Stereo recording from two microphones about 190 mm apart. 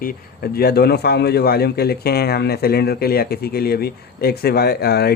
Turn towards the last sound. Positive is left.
turn(degrees=55)  # may be behind; listen again after turning